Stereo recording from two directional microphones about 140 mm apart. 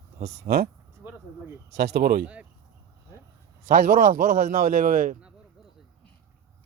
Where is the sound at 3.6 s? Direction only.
80° right.